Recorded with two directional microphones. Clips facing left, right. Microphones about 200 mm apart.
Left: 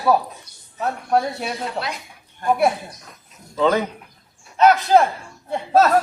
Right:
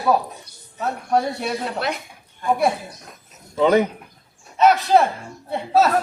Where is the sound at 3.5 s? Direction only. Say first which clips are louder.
Right 2 dB; 15° right (ahead or behind).